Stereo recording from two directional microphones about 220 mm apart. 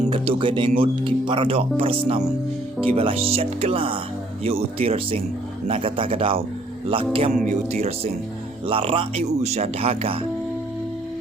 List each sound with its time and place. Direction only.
0.0 s music: 25° right (ahead or behind)
0.8 s speech: 20° right (ahead or behind)